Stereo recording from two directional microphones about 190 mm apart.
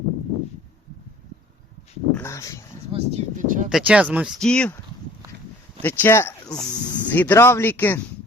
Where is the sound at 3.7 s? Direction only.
5° right (ahead or behind).